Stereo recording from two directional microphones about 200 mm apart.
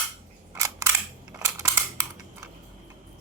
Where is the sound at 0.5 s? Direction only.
15° right (ahead or behind).